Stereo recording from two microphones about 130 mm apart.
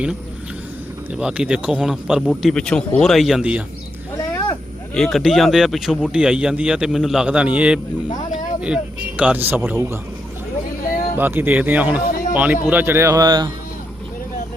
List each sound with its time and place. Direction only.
1.1 s speech: 10° right (ahead or behind)
4.2 s a sound: 30° left (ahead or behind)
4.9 s speech: centre (ahead or behind); by 10.0 s 20° right (ahead or behind)
11.2 s a man's voice: 15° right (ahead or behind); by 13.5 s 35° right (ahead or behind)